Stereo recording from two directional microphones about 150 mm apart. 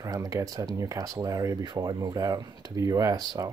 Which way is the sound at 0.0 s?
25° right (ahead or behind).